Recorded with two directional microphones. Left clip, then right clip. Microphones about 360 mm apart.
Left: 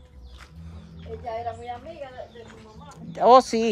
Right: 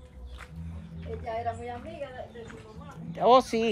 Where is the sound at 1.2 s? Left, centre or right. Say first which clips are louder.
Left 1 dB; left.